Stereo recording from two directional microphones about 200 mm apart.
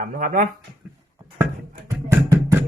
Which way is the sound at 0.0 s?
40° right (ahead or behind).